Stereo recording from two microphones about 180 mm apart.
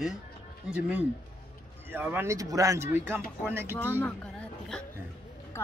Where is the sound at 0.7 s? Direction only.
5° right (ahead or behind).